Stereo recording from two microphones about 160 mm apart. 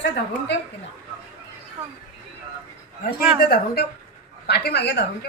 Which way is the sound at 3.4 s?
70° left (ahead or behind).